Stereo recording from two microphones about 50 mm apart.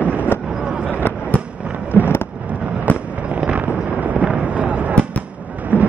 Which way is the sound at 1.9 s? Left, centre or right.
Left.